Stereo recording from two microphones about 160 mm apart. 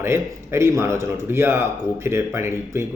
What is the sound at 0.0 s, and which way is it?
Speech, 15° right (ahead or behind).